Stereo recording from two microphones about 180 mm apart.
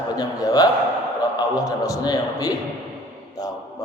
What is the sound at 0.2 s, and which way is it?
Mantra, 20° left (ahead or behind).